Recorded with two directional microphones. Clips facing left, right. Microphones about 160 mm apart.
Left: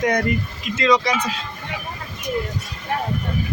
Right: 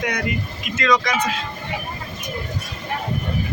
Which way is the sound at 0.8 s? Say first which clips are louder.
Left 2 dB; 30° left (ahead or behind).